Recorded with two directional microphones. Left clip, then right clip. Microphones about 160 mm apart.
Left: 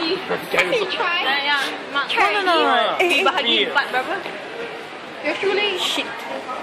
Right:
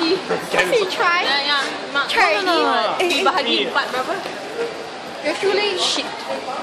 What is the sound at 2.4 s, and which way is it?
A woman's voice, 10° left (ahead or behind).